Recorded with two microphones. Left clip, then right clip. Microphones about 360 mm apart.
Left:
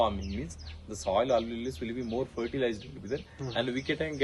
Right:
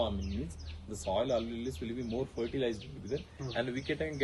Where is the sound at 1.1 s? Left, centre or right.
Centre.